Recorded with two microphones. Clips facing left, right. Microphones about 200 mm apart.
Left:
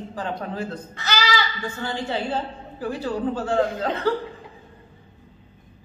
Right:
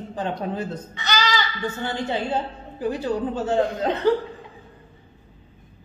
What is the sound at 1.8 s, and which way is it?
A woman's voice, 20° right (ahead or behind).